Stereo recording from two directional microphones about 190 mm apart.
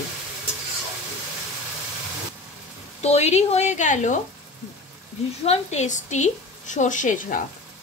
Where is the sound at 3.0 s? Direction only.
35° left (ahead or behind).